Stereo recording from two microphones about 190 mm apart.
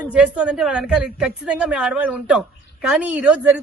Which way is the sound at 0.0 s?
5° right (ahead or behind).